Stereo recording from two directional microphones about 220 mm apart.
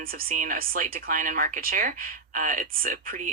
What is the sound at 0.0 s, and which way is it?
Speech, 40° right (ahead or behind).